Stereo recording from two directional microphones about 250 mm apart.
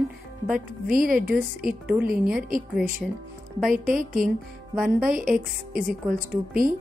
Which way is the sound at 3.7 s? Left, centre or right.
Right.